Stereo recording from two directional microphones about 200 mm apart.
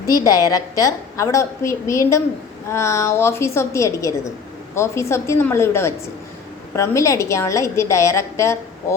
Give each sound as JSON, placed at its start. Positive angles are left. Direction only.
{"t": 0.1, "sound": "a woman's voice", "side_deg": 20}